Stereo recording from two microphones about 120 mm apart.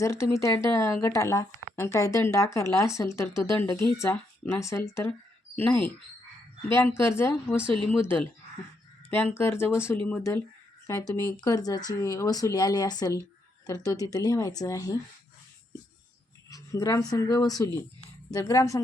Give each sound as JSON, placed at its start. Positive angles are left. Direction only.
{"t": 0.0, "sound": "speech", "side_deg": 20}
{"t": 7.6, "sound": "speech", "side_deg": -50}
{"t": 9.3, "sound": "speech", "side_deg": 20}
{"t": 10.8, "sound": "speech", "side_deg": 25}
{"t": 16.5, "sound": "a sound", "side_deg": 30}
{"t": 17.1, "sound": "speech", "side_deg": 30}